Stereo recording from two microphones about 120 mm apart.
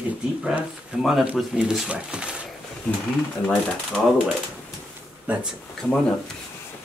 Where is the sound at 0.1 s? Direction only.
10° right (ahead or behind).